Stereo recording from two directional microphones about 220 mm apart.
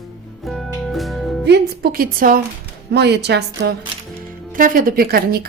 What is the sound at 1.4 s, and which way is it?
Speech, 45° right (ahead or behind).